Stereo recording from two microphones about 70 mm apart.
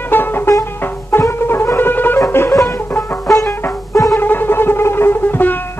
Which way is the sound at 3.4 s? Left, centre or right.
Left.